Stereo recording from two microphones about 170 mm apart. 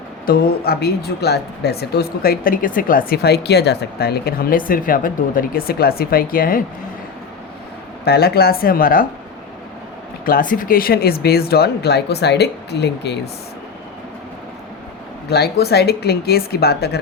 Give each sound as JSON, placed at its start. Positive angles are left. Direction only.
{"t": 0.3, "sound": "a woman's voice", "side_deg": 60}
{"t": 8.0, "sound": "a woman's voice", "side_deg": 65}
{"t": 10.2, "sound": "speech", "side_deg": 55}
{"t": 15.3, "sound": "speech", "side_deg": 70}